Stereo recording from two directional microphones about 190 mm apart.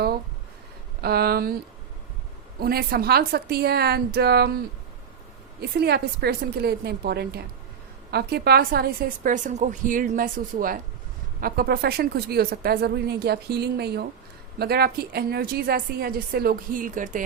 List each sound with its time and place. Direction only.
1.0 s speech: 55° right (ahead or behind)
2.6 s speech: 55° right (ahead or behind)
5.5 s a woman's voice: 55° right (ahead or behind)